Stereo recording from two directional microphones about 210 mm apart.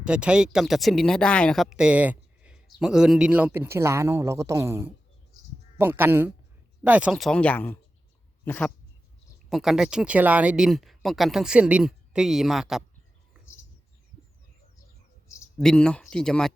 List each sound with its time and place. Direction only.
0.0 s speech: 5° right (ahead or behind)
15.5 s speech: 5° left (ahead or behind)